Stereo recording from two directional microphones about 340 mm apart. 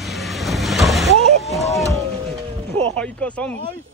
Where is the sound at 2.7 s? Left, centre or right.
Centre.